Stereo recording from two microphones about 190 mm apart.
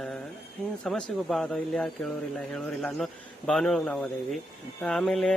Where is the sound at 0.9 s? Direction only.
Centre (ahead or behind).